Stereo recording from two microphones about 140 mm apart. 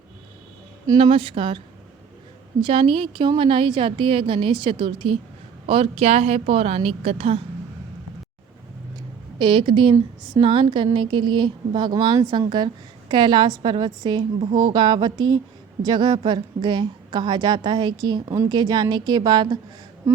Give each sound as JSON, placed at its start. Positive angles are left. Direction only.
{"t": 0.9, "sound": "a woman's voice", "side_deg": -40}
{"t": 9.4, "sound": "a woman's voice", "side_deg": -35}
{"t": 9.9, "sound": "speech", "side_deg": -25}
{"t": 10.4, "sound": "a woman's voice", "side_deg": -40}